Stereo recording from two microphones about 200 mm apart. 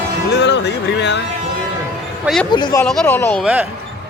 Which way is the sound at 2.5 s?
20° left (ahead or behind).